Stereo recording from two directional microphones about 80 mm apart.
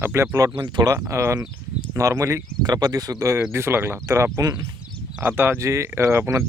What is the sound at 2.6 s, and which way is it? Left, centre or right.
Speech, right.